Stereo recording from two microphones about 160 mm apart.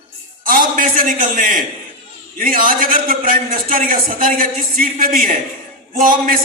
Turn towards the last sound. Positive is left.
turn(degrees=-60)  # may be behind; listen again after turning